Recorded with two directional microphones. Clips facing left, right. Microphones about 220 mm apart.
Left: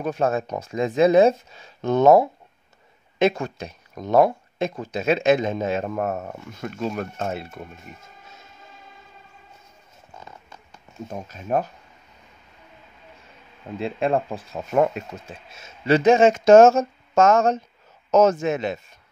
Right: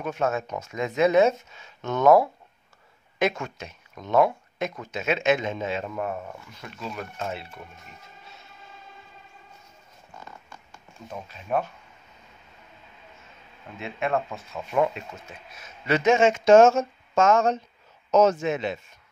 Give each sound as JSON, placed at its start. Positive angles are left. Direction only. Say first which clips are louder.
{"t": 0.0, "sound": "speech", "louder": "left 4 dB", "side_deg": 35}
{"t": 10.2, "sound": "a sound", "louder": "left 1 dB", "side_deg": 20}
{"t": 11.1, "sound": "speech", "louder": "left 3 dB", "side_deg": 45}
{"t": 13.7, "sound": "speech", "louder": "left 5 dB", "side_deg": 35}
{"t": 15.2, "sound": "speech", "louder": "left 3 dB", "side_deg": 30}